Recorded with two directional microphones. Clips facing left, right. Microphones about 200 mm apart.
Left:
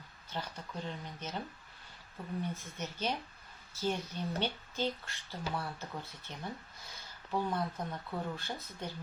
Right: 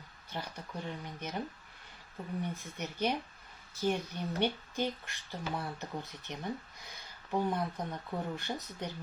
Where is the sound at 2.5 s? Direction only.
15° right (ahead or behind).